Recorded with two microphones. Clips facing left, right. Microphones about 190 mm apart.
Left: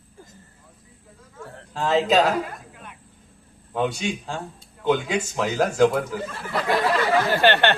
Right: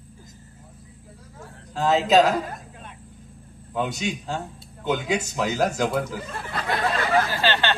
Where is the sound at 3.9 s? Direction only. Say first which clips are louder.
Even; 40° right (ahead or behind).